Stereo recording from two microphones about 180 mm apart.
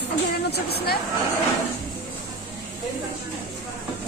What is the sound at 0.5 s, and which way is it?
Speech, 60° left (ahead or behind).